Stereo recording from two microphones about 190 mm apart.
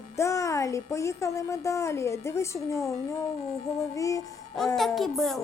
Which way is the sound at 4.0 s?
15° left (ahead or behind).